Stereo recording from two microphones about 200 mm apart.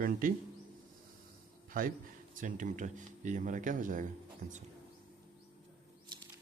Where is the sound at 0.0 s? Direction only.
45° right (ahead or behind).